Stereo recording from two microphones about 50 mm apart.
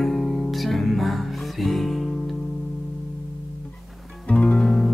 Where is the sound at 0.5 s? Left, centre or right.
Centre.